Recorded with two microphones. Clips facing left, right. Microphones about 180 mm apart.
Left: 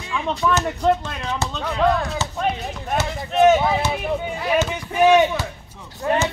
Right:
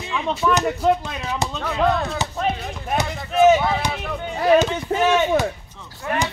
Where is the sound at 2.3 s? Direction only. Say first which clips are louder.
Even; centre (ahead or behind).